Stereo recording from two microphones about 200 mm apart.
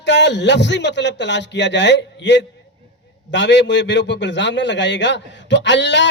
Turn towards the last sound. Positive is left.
turn(degrees=60)  # may be behind; listen again after turning